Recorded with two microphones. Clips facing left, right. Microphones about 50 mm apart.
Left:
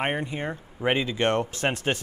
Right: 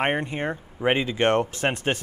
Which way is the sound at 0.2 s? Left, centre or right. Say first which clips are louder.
Right 3 dB; right.